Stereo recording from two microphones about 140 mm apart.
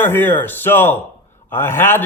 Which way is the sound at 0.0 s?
15° left (ahead or behind).